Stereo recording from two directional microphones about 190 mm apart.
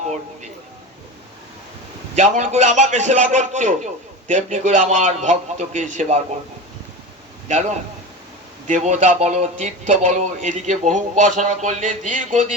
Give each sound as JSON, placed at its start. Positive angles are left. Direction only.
{"t": 2.1, "sound": "a man's voice", "side_deg": -40}
{"t": 8.6, "sound": "a man's voice", "side_deg": -40}